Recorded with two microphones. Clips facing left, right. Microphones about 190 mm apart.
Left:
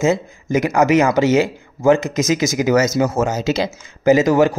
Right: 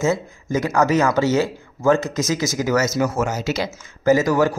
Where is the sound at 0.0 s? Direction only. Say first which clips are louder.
Left 3 dB; 20° left (ahead or behind).